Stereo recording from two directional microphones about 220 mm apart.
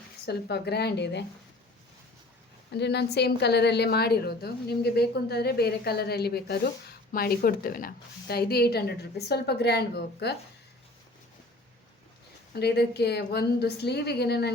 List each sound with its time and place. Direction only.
0.3 s a woman's voice: 45° left (ahead or behind)
2.7 s a woman's voice: 50° left (ahead or behind)
12.5 s a woman's voice: 50° left (ahead or behind)